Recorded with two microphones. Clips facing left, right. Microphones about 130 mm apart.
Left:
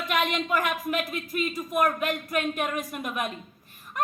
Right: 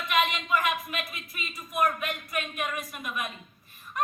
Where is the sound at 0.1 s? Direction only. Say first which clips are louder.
Even; 50° left (ahead or behind).